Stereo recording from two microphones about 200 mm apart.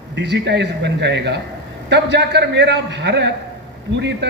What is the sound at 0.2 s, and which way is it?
A man's voice, 60° right (ahead or behind).